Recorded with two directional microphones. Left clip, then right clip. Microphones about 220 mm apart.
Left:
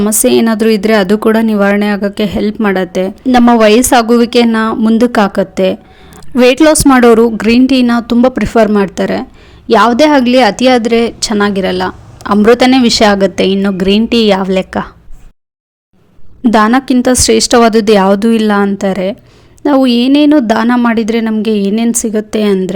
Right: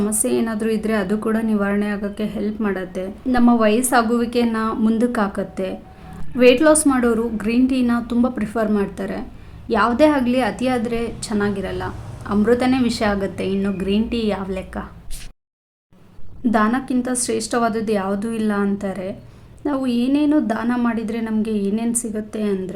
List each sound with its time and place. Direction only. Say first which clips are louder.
0.0 s speech: left 12 dB; 40° left (ahead or behind)
16.4 s speech: left 11 dB; 40° left (ahead or behind)